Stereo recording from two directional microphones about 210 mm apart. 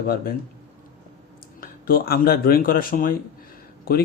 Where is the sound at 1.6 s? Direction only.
45° left (ahead or behind).